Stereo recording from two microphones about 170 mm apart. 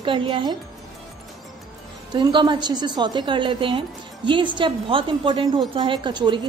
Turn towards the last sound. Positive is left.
turn(degrees=-25)  # may be behind; listen again after turning